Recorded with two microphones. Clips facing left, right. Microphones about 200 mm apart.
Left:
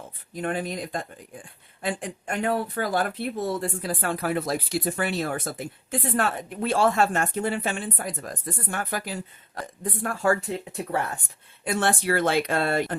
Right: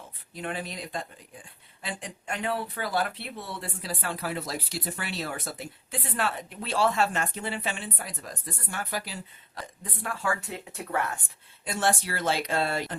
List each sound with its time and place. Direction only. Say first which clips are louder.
0.3 s speech: left 6 dB; 50° left (ahead or behind)
11.6 s speech: left 3 dB; 60° left (ahead or behind)